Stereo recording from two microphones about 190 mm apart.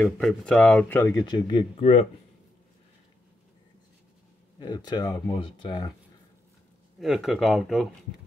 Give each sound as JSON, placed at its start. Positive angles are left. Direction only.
{"t": 0.0, "sound": "speech", "side_deg": 5}
{"t": 1.2, "sound": "speech", "side_deg": 25}
{"t": 4.6, "sound": "speech", "side_deg": 20}
{"t": 7.0, "sound": "speech", "side_deg": 0}